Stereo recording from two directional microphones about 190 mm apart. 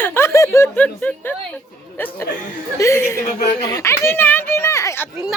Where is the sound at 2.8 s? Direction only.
15° left (ahead or behind).